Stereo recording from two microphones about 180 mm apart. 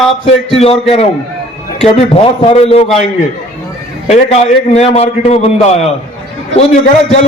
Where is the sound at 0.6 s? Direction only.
35° left (ahead or behind).